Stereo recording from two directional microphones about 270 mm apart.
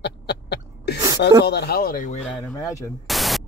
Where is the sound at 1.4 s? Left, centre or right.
Left.